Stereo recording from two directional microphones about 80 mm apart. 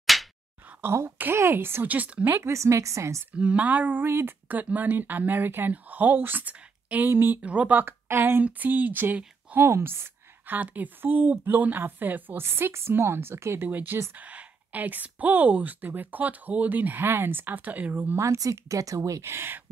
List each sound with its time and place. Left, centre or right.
0.0 s slap: centre
0.7 s a woman's voice: right
3.3 s speech: centre
7.8 s speech: right
9.7 s speech: right
13.7 s speech: right
18.1 s a woman's voice: right